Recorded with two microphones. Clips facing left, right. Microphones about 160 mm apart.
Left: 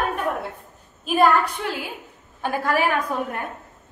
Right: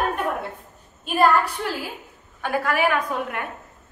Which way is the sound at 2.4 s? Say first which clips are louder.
Even; 35° left (ahead or behind).